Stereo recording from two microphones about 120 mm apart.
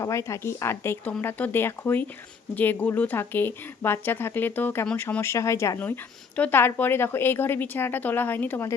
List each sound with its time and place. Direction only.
0.0 s a woman's voice: 25° left (ahead or behind)